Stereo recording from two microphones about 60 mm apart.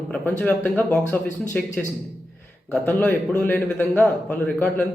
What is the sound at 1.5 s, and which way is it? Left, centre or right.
Speech, centre.